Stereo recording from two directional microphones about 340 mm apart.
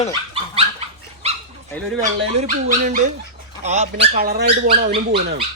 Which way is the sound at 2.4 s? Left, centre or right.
Right.